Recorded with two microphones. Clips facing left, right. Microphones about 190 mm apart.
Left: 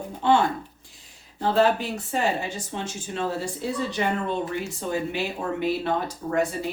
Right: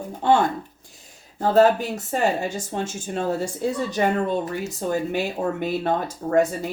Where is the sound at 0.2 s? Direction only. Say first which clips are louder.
Right 2 dB; 45° right (ahead or behind).